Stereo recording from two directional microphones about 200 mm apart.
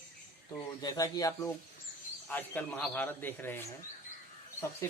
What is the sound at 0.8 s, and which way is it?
Speech, 15° left (ahead or behind).